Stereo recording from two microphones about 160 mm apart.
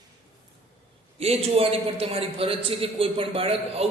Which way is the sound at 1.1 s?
40° right (ahead or behind).